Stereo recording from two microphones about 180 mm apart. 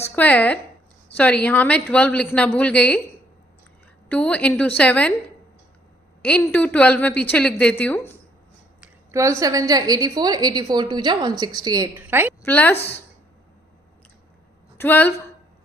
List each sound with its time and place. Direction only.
0.0 s a woman's voice: 10° left (ahead or behind)
4.1 s a woman's voice: 5° left (ahead or behind)
6.2 s a woman's voice: 10° left (ahead or behind)
9.1 s a woman's voice: 15° right (ahead or behind)
12.4 s speech: 10° left (ahead or behind)
14.8 s a woman's voice: 10° left (ahead or behind)